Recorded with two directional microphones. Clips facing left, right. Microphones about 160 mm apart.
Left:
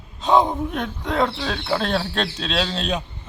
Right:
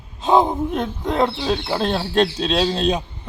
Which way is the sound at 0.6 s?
25° right (ahead or behind).